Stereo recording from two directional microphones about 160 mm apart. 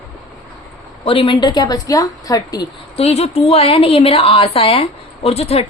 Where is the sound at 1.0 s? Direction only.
35° left (ahead or behind).